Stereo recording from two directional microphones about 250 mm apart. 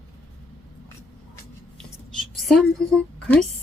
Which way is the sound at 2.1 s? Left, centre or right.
Centre.